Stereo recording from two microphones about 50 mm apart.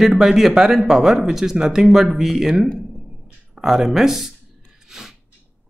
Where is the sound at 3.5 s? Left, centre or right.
Centre.